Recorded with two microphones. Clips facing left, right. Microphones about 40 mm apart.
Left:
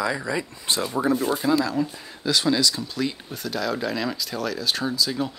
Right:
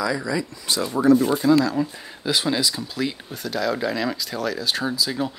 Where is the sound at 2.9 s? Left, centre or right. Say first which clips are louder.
Right 1 dB; centre.